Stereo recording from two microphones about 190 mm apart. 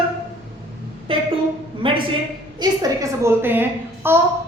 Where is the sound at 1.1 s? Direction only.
30° right (ahead or behind).